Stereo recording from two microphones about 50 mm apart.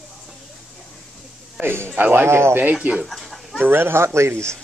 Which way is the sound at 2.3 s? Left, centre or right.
Right.